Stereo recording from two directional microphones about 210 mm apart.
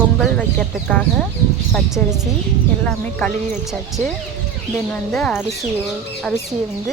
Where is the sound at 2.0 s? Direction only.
5° left (ahead or behind).